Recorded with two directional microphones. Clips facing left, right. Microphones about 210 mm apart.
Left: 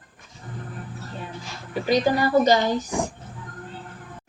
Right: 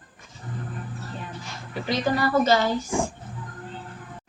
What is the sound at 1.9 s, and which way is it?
Speech, 15° left (ahead or behind).